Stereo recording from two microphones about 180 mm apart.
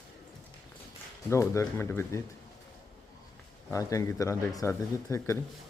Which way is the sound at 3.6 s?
15° left (ahead or behind).